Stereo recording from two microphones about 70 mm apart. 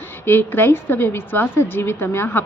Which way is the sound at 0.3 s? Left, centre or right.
Left.